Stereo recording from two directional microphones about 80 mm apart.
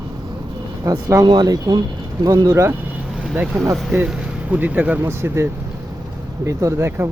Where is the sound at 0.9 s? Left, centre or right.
Right.